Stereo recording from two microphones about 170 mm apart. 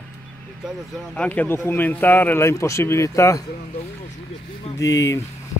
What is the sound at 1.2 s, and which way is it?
Speech, 10° left (ahead or behind).